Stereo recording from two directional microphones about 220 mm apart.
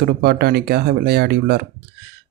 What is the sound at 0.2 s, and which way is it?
Speech, 45° right (ahead or behind).